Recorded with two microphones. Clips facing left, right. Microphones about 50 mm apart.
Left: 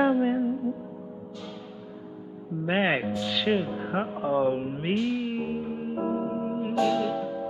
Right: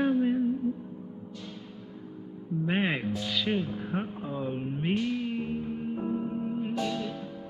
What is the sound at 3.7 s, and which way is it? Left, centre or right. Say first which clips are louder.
Music: left 4 dB; left.